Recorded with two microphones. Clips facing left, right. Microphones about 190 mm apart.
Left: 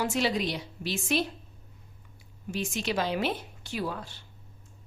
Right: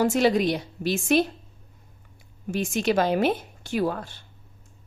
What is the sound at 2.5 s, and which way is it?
Speech, 50° right (ahead or behind).